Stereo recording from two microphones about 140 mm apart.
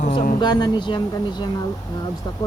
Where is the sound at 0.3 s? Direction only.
30° left (ahead or behind).